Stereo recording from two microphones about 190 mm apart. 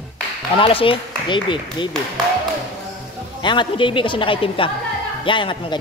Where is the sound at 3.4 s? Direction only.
25° left (ahead or behind).